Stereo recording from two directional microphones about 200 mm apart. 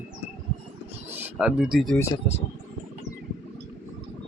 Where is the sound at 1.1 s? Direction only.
5° right (ahead or behind).